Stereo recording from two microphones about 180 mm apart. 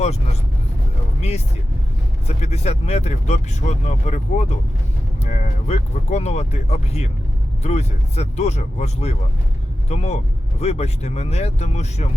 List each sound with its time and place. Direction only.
2.2 s speech: 35° left (ahead or behind)